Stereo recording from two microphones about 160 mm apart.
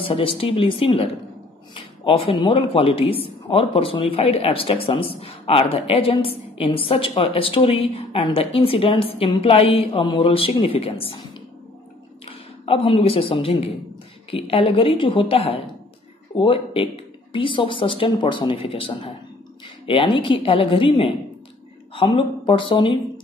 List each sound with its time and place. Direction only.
0.0 s speech: 35° left (ahead or behind)
12.3 s speech: 35° left (ahead or behind)